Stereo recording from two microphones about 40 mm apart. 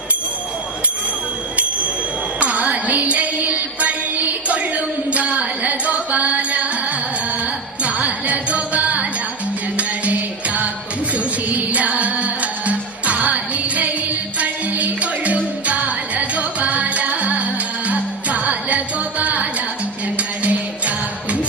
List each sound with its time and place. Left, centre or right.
2.4 s music: right
4.5 s a sound: right
7.9 s music: right
11.1 s music: right